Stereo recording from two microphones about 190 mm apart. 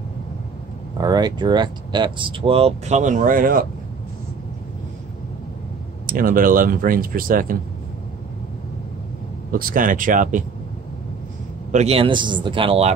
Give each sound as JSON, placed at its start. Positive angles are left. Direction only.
{"t": 1.0, "sound": "speech", "side_deg": -20}
{"t": 6.0, "sound": "speech", "side_deg": -50}
{"t": 9.5, "sound": "speech", "side_deg": -50}
{"t": 11.7, "sound": "speech", "side_deg": -35}